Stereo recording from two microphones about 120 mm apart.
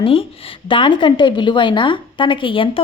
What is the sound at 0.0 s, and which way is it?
A woman's voice, 50° left (ahead or behind).